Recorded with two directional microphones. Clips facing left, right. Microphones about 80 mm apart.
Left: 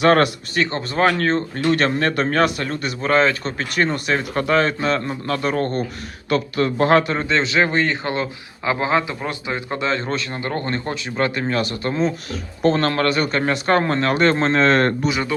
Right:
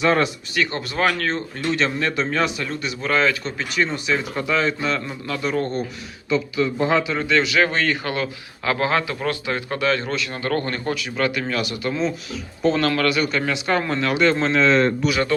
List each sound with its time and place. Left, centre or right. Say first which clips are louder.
0.0 s a man's voice: left 4 dB; left
0.5 s speech: left 2 dB; left
6.2 s a man's voice: left 1 dB; left
7.1 s speech: even; left
15.3 s speech: right 4 dB; centre